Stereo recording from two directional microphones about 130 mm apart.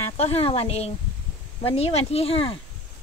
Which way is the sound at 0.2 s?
50° left (ahead or behind).